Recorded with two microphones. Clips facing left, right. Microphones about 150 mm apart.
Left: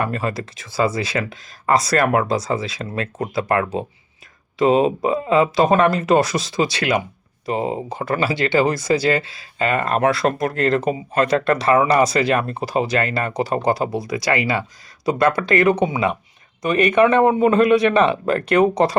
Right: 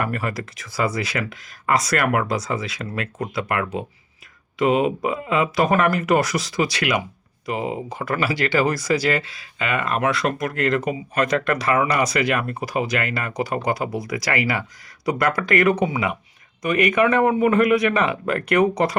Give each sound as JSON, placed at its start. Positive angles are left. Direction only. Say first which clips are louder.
{"t": 0.0, "sound": "speech", "louder": "left 2 dB", "side_deg": 25}